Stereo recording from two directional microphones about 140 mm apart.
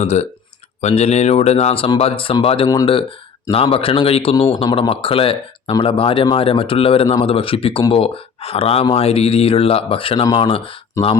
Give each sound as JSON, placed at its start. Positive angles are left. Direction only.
{"t": 0.0, "sound": "a man's voice", "side_deg": 55}
{"t": 11.0, "sound": "speech", "side_deg": 20}